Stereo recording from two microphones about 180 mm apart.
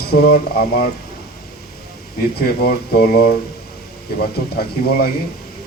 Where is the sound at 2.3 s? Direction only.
60° left (ahead or behind).